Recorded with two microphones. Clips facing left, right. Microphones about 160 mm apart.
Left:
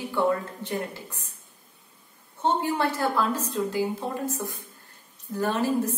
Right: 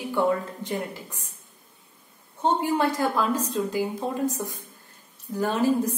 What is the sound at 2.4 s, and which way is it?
A woman's voice, 15° right (ahead or behind).